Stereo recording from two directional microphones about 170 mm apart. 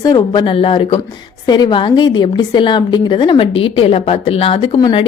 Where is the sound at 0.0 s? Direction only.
25° left (ahead or behind).